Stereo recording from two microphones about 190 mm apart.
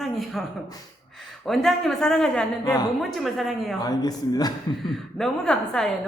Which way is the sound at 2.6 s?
20° left (ahead or behind).